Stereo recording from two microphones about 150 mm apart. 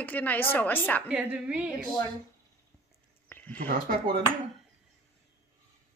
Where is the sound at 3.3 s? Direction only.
10° left (ahead or behind).